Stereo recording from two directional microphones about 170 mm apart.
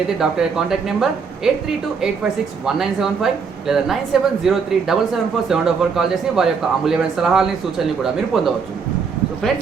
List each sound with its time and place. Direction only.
0.2 s speech: 5° right (ahead or behind)
2.6 s speech: 5° right (ahead or behind)